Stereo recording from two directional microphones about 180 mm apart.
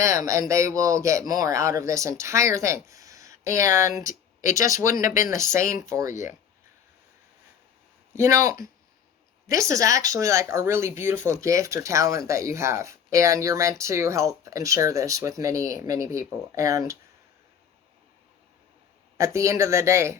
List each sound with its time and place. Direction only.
0.0 s speech: 15° right (ahead or behind)
4.0 s a sound: 45° left (ahead or behind)
4.5 s speech: 15° right (ahead or behind)
8.1 s speech: 15° right (ahead or behind)
19.1 s speech: 15° right (ahead or behind)